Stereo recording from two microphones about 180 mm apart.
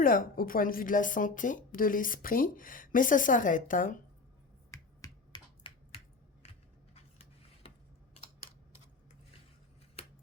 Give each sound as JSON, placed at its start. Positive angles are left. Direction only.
{"t": 0.0, "sound": "speech", "side_deg": 50}
{"t": 4.7, "sound": "finger snapping", "side_deg": 20}
{"t": 6.9, "sound": "a sound", "side_deg": 35}